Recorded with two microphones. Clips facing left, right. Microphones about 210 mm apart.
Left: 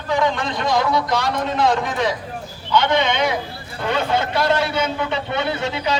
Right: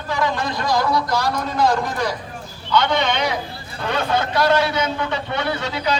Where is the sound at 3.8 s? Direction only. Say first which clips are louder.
Left 1 dB; 20° left (ahead or behind).